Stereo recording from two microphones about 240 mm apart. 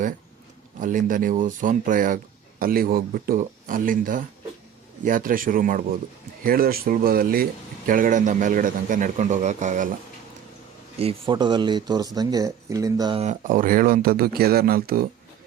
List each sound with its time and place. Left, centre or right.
0.8 s a man's voice: right
10.9 s speech: right